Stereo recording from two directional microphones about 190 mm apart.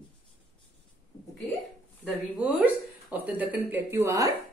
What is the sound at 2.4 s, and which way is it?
Speech, 10° right (ahead or behind).